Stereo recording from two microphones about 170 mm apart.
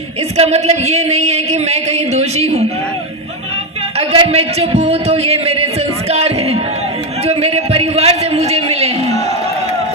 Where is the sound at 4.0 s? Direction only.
35° right (ahead or behind).